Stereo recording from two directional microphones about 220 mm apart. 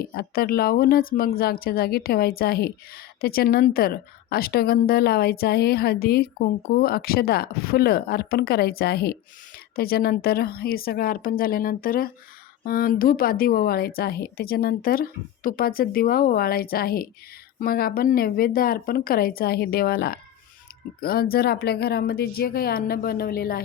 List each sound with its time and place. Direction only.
0.0 s a woman's voice: 45° left (ahead or behind)